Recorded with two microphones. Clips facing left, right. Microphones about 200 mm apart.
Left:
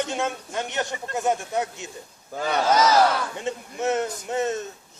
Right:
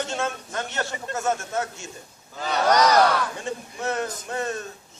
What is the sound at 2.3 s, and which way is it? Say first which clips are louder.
Speech: left 3 dB; 50° left (ahead or behind).